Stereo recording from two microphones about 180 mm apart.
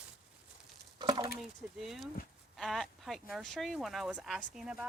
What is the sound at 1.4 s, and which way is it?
Speech, centre (ahead or behind).